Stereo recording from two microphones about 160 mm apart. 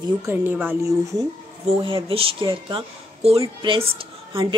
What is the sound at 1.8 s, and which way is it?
A woman's voice, 35° right (ahead or behind).